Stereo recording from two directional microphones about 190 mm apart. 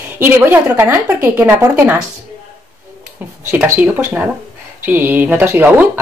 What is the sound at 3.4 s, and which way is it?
Speech, 10° right (ahead or behind).